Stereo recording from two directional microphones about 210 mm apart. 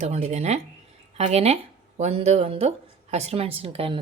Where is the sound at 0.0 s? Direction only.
30° right (ahead or behind).